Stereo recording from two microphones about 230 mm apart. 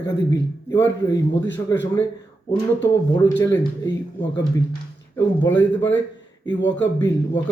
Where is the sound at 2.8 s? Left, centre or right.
Centre.